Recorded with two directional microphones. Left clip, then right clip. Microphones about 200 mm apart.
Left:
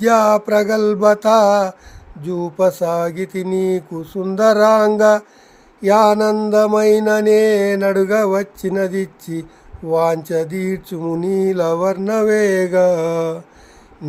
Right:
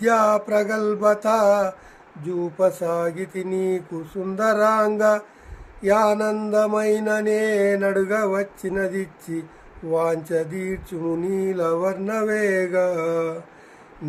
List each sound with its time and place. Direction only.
0.0 s mantra: 50° left (ahead or behind)